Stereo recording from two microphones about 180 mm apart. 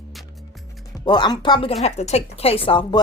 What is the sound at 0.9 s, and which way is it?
A woman's voice, 25° left (ahead or behind).